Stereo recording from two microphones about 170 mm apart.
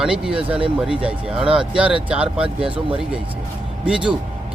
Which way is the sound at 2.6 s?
30° right (ahead or behind).